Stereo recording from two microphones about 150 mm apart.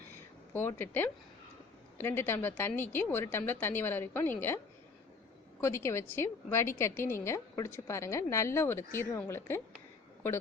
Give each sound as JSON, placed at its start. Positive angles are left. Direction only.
{"t": 0.5, "sound": "a woman's voice", "side_deg": 15}